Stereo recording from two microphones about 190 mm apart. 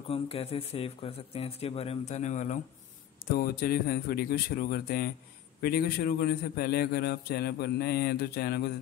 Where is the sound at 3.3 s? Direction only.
50° left (ahead or behind).